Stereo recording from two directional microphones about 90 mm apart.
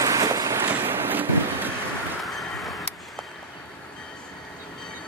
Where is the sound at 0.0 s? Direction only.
40° right (ahead or behind); by 1.7 s 20° right (ahead or behind).